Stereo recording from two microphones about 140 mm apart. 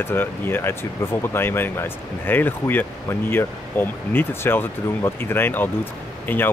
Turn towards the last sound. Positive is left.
turn(degrees=15)  # may be behind; listen again after turning